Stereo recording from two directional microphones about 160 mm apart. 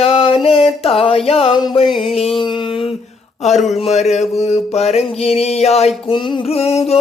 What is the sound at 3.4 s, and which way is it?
Speech, 45° left (ahead or behind).